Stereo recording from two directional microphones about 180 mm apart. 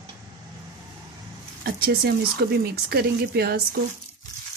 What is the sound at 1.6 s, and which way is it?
Speech, 60° right (ahead or behind).